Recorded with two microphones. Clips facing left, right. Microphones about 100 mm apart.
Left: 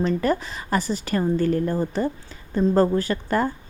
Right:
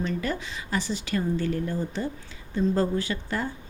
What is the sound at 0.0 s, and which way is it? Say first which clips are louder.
A woman's voice: left 7 dB; 45° left (ahead or behind).